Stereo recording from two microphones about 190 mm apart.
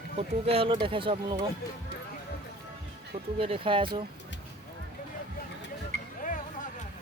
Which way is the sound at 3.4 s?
30° right (ahead or behind).